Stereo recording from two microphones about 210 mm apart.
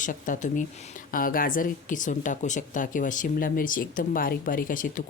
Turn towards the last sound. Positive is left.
turn(degrees=40)  # may be behind; listen again after turning